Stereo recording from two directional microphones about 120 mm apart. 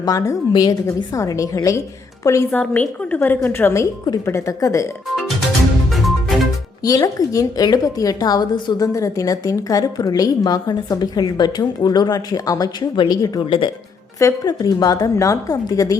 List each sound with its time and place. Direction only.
0.0 s a woman's voice: 30° left (ahead or behind)
2.5 s a woman's voice: 10° left (ahead or behind)
5.9 s music: centre (ahead or behind)
6.8 s a woman's voice: 30° left (ahead or behind)